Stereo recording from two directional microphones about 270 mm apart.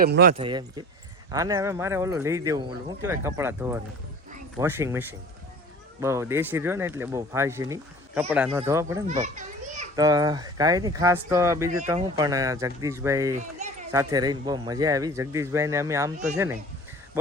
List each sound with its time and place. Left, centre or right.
0.0 s speech: right
0.3 s a man's voice: centre
9.2 s children playing: right
9.9 s a man's voice: centre
13.4 s children playing: right
13.9 s a man's voice: centre